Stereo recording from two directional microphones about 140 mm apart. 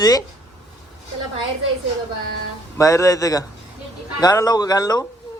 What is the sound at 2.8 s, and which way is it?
Speech, 25° left (ahead or behind).